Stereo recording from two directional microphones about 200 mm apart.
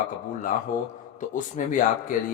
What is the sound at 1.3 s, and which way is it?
Speech, 40° left (ahead or behind).